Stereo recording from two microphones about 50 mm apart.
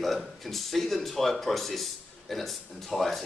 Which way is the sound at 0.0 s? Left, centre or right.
Centre.